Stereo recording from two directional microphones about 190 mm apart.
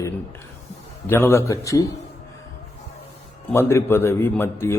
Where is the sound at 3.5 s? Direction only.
15° left (ahead or behind).